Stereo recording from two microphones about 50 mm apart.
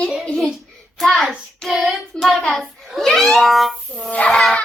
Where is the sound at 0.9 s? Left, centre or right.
Centre.